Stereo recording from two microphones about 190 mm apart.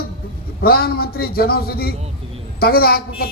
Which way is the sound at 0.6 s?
55° left (ahead or behind).